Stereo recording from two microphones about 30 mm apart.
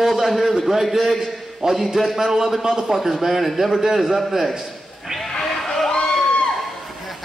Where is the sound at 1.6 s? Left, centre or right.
Right.